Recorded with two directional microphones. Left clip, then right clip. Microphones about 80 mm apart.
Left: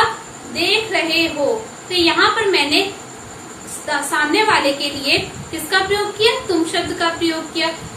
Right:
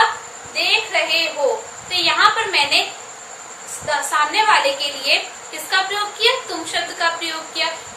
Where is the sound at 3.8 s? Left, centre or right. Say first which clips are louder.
Even; right.